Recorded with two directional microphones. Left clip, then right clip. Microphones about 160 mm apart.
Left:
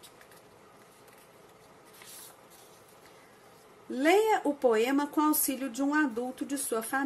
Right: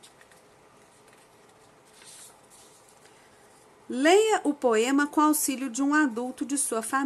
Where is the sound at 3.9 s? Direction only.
25° right (ahead or behind).